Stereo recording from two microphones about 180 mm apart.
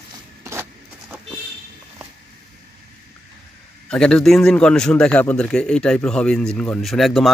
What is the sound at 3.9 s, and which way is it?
A man's voice, 5° left (ahead or behind).